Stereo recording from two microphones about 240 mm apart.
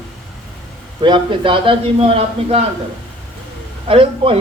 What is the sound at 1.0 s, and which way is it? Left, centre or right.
Speech, centre.